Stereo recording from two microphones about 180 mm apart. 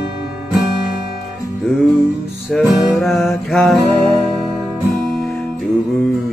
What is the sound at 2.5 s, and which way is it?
Music, centre (ahead or behind).